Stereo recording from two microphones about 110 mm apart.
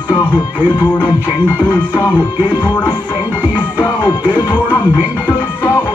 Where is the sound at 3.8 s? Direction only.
40° left (ahead or behind).